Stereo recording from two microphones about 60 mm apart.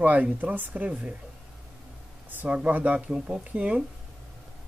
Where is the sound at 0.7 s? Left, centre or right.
Centre.